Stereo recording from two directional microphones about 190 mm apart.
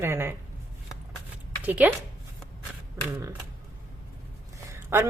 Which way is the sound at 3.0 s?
10° right (ahead or behind).